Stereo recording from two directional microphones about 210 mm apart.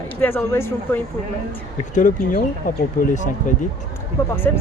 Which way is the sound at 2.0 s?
40° left (ahead or behind).